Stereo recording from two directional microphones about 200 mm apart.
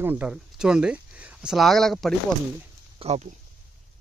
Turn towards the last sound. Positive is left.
turn(degrees=-30)  # may be behind; listen again after turning